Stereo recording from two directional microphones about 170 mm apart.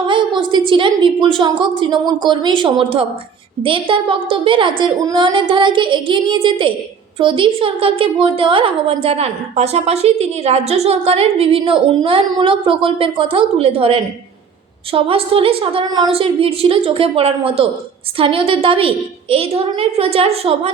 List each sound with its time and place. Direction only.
0.1 s a woman's voice: 25° right (ahead or behind)